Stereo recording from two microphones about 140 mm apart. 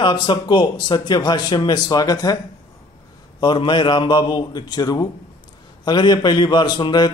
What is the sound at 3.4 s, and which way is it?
Speech, 35° left (ahead or behind).